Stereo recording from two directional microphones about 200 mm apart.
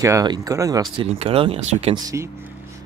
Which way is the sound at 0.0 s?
20° right (ahead or behind).